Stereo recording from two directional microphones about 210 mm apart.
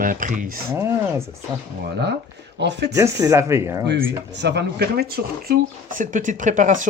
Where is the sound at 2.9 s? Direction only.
15° right (ahead or behind).